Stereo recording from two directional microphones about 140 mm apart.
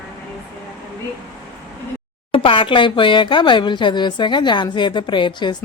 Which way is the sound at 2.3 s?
40° left (ahead or behind).